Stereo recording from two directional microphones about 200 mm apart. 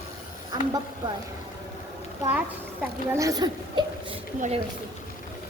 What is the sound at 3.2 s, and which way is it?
Speech, 20° right (ahead or behind).